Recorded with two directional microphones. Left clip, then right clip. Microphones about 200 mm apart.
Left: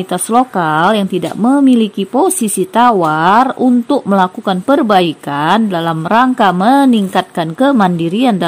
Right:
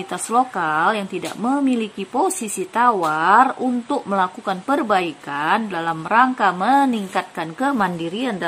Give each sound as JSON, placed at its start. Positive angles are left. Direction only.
{"t": 0.1, "sound": "speech", "side_deg": 35}